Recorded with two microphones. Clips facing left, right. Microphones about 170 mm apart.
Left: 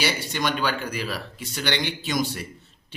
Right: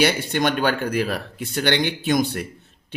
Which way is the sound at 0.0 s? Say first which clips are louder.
Right 6 dB; 55° right (ahead or behind).